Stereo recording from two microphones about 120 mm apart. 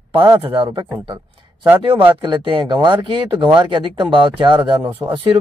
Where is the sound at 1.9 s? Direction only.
40° right (ahead or behind).